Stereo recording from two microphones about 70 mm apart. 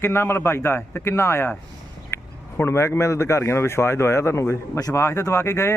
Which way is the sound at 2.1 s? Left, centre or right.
Left.